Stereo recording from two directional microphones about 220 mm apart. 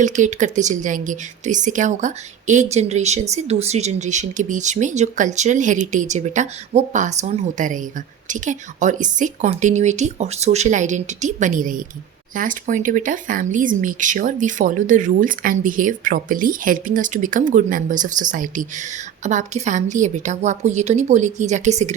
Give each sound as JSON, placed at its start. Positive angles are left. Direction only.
{"t": 0.0, "sound": "speech", "side_deg": -35}